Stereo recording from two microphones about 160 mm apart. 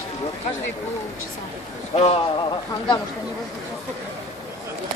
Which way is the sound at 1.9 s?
40° left (ahead or behind).